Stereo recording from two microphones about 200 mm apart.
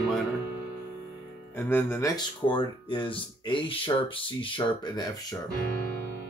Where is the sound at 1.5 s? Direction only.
10° left (ahead or behind).